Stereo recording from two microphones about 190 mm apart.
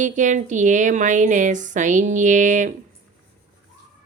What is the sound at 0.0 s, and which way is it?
A woman's voice, 40° right (ahead or behind).